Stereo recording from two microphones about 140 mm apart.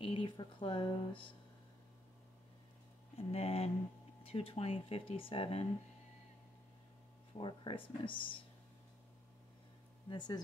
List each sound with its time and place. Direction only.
0.0 s speech: 40° left (ahead or behind)
3.2 s speech: 45° left (ahead or behind)
7.3 s speech: 35° left (ahead or behind)
10.0 s speech: 30° left (ahead or behind)